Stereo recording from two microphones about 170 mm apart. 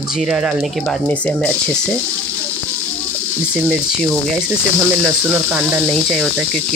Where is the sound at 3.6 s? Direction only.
5° left (ahead or behind).